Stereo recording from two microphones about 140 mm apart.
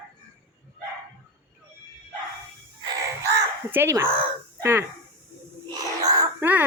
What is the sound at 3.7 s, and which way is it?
Speech, 15° right (ahead or behind).